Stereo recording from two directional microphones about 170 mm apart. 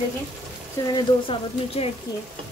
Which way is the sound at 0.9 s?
30° left (ahead or behind).